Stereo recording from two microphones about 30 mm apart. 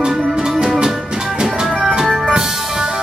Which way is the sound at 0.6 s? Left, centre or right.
Centre.